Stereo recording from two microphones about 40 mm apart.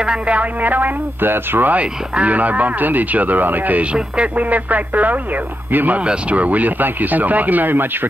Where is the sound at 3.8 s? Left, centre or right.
Right.